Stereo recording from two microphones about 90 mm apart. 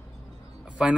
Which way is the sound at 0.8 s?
10° right (ahead or behind).